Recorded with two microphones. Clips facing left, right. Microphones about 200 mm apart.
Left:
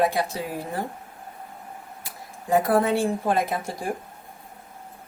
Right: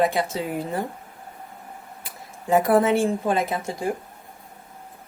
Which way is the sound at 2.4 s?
20° right (ahead or behind).